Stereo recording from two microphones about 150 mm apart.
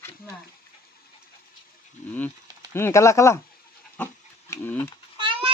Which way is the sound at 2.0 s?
50° left (ahead or behind).